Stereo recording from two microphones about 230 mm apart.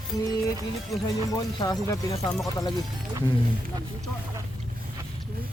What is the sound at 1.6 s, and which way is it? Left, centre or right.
Speech, centre.